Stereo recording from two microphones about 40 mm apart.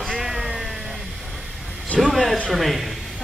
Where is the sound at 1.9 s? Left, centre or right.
Left.